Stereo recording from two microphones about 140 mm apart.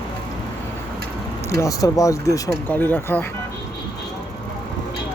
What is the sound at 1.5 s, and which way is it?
Speech, 20° left (ahead or behind).